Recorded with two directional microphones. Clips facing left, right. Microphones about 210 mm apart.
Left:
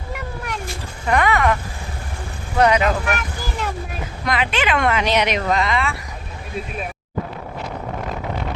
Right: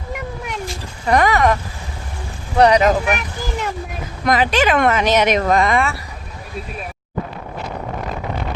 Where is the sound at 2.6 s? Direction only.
35° right (ahead or behind).